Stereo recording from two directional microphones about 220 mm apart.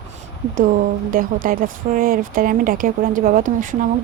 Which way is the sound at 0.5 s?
40° right (ahead or behind).